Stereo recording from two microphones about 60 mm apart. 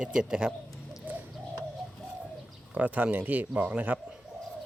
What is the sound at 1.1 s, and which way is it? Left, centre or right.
Bird, right.